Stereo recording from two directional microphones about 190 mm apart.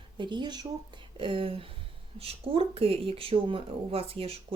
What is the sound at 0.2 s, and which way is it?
Speech, 25° right (ahead or behind).